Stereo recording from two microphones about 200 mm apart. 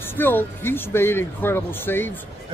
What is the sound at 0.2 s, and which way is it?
Speech, 10° left (ahead or behind).